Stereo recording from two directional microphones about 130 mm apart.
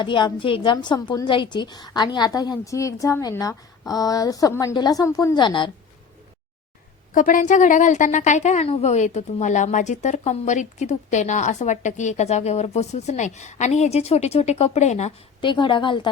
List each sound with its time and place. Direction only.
0.0 s a woman's voice: 35° left (ahead or behind)
5.3 s a woman's voice: 35° left (ahead or behind)
7.1 s a woman's voice: 85° left; by 15.1 s 60° left (ahead or behind)
15.4 s a woman's voice: 40° left (ahead or behind)